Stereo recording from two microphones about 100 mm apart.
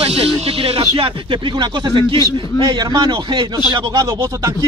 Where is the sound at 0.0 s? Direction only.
90° right; by 2.1 s 55° right (ahead or behind).